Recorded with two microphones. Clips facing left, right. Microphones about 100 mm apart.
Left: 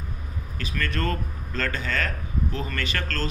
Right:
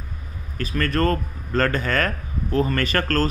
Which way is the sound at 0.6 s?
45° right (ahead or behind).